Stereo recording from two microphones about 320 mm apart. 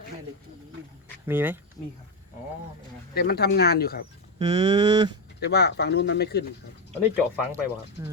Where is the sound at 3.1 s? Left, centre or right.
Left.